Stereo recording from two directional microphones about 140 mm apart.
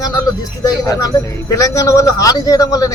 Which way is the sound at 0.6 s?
25° left (ahead or behind).